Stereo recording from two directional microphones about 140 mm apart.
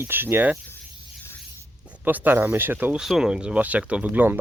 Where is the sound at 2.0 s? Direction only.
15° right (ahead or behind).